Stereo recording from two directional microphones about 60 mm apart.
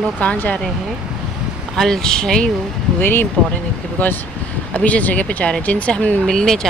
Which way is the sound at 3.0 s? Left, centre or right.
Left.